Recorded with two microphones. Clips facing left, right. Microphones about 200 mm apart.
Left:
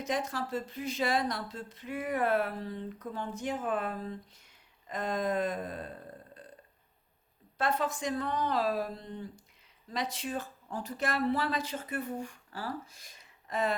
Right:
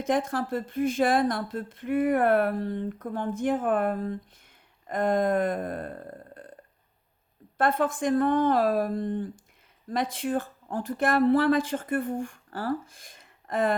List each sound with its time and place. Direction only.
0.0 s speech: 50° right (ahead or behind)
7.6 s speech: 55° right (ahead or behind)